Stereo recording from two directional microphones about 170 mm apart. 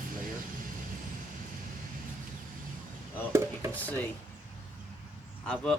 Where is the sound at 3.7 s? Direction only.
10° left (ahead or behind).